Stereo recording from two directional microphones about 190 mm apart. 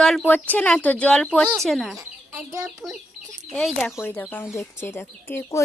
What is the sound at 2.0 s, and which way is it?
Chicken, 15° right (ahead or behind).